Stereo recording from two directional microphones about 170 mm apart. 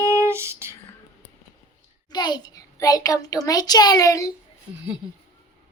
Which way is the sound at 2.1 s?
25° left (ahead or behind).